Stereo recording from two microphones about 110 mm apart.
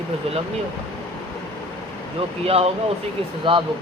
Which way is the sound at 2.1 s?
65° right (ahead or behind).